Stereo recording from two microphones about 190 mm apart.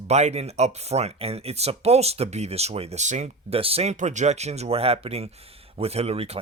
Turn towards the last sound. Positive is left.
turn(degrees=-30)  # may be behind; listen again after turning